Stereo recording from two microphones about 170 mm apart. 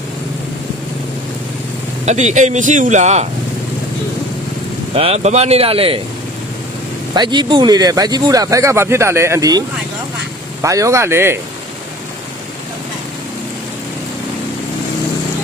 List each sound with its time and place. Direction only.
2.0 s speech: 45° right (ahead or behind)
4.9 s a man's voice: 35° right (ahead or behind)
7.1 s speech: 25° right (ahead or behind)